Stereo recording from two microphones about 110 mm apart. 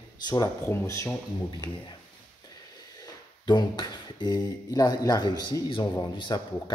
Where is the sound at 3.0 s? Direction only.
45° left (ahead or behind).